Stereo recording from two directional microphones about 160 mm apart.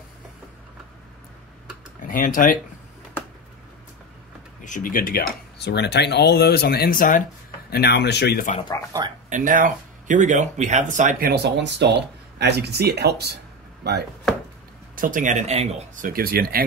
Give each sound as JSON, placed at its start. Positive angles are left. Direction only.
{"t": 2.0, "sound": "speech", "side_deg": 55}
{"t": 4.6, "sound": "speech", "side_deg": 55}
{"t": 7.7, "sound": "speech", "side_deg": 90}
{"t": 8.5, "sound": "speech", "side_deg": 25}
{"t": 9.3, "sound": "speech", "side_deg": -55}
{"t": 15.0, "sound": "speech", "side_deg": -55}
{"t": 16.1, "sound": "speech", "side_deg": -70}